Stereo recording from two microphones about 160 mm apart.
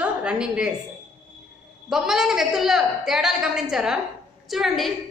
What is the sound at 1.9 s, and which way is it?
A woman's voice, centre (ahead or behind).